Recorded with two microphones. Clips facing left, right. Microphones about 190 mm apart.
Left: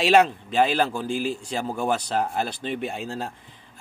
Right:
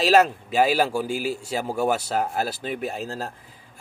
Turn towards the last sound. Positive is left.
turn(degrees=0)  # may be behind; listen again after turning